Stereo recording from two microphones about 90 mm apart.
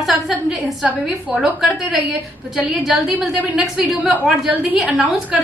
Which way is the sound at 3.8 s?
15° right (ahead or behind).